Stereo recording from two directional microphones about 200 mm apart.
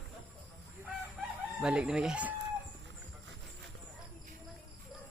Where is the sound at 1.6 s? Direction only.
5° right (ahead or behind).